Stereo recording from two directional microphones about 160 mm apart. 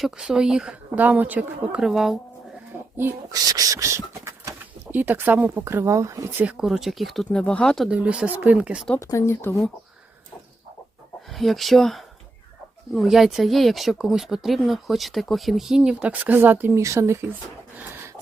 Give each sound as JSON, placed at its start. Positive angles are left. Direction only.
{"t": 0.0, "sound": "speech", "side_deg": -5}
{"t": 3.0, "sound": "speech", "side_deg": -20}
{"t": 6.4, "sound": "speech", "side_deg": -5}
{"t": 9.0, "sound": "speech", "side_deg": 20}
{"t": 11.3, "sound": "speech", "side_deg": 0}